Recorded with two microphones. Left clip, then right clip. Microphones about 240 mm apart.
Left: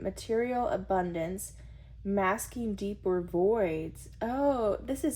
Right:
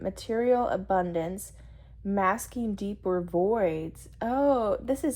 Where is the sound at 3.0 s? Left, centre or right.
Centre.